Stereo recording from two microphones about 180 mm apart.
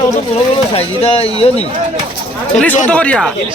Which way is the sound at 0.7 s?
30° left (ahead or behind).